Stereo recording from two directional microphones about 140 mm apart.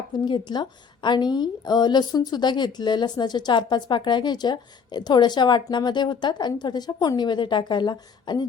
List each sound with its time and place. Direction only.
0.3 s a woman's voice: 30° left (ahead or behind)